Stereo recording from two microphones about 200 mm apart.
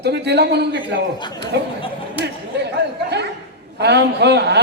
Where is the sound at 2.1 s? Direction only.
55° right (ahead or behind).